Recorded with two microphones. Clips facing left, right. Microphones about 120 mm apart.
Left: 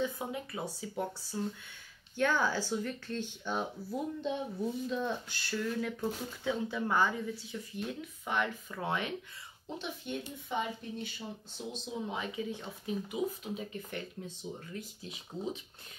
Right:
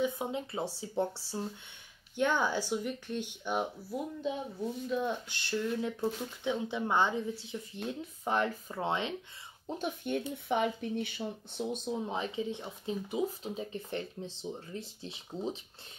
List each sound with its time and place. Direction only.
0.0 s speech: 20° right (ahead or behind)
2.1 s speech: 20° right (ahead or behind); by 4.9 s centre (ahead or behind)
5.0 s speech: 20° right (ahead or behind)
8.3 s speech: 35° right (ahead or behind)
8.8 s speech: 25° right (ahead or behind)
9.8 s speech: 50° right (ahead or behind)
12.1 s speech: 30° right (ahead or behind)